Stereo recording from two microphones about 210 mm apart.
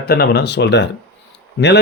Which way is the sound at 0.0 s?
50° left (ahead or behind).